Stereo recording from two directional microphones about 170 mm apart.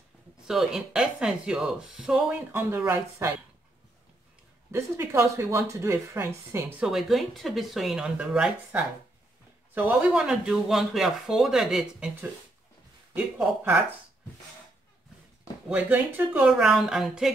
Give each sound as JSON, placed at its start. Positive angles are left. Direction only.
{"t": 0.5, "sound": "speech", "side_deg": 0}
{"t": 4.6, "sound": "speech", "side_deg": -15}
{"t": 6.9, "sound": "speech", "side_deg": 0}
{"t": 15.7, "sound": "speech", "side_deg": -10}